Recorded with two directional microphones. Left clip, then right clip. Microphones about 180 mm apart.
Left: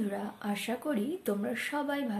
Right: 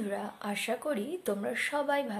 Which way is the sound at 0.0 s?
25° right (ahead or behind).